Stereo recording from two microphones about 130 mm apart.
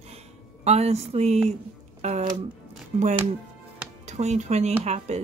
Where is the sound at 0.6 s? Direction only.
55° right (ahead or behind).